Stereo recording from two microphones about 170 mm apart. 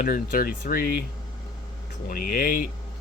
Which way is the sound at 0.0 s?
55° left (ahead or behind).